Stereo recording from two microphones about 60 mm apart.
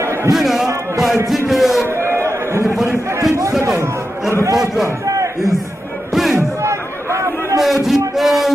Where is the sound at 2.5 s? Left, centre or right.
Right.